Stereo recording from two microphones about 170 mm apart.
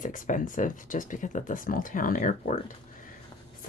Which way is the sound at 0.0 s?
50° left (ahead or behind).